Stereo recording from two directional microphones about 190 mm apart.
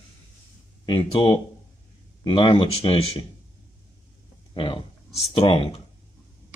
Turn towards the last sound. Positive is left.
turn(degrees=30)  # may be behind; listen again after turning